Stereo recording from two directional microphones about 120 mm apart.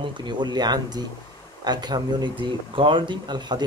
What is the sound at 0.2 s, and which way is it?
Speech, 40° right (ahead or behind).